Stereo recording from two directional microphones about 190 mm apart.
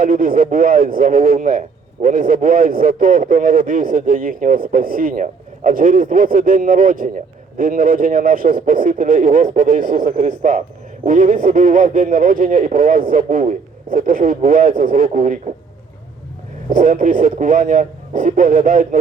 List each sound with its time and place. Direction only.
0.0 s speech: 45° right (ahead or behind)
16.6 s speech: 45° right (ahead or behind)